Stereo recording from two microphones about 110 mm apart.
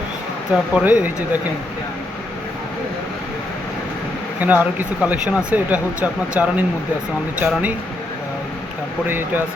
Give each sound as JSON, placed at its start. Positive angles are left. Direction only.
{"t": 0.5, "sound": "speech", "side_deg": -10}
{"t": 4.4, "sound": "speech", "side_deg": -15}
{"t": 9.0, "sound": "speech", "side_deg": -20}